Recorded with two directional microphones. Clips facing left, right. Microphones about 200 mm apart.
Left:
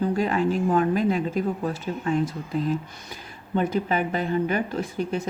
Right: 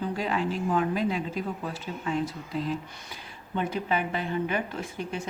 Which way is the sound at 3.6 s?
40° left (ahead or behind).